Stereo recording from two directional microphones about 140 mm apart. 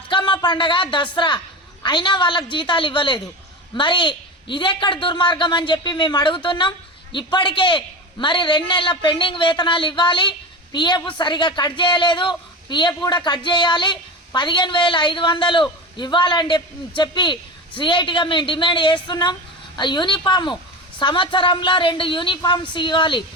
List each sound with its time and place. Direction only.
0.1 s a woman's voice: 35° left (ahead or behind)